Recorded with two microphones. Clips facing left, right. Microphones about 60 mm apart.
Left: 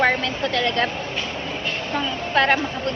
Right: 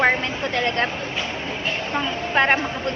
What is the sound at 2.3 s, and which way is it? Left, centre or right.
Speech, right.